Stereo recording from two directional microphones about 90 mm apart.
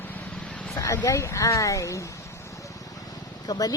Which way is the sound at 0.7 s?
35° left (ahead or behind).